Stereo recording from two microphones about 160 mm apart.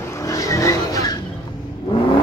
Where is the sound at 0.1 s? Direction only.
20° left (ahead or behind).